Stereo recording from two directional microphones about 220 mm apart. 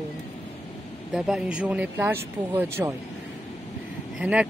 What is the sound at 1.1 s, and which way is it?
Speech, centre (ahead or behind).